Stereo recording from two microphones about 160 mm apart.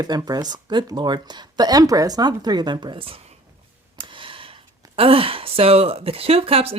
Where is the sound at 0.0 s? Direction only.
25° right (ahead or behind).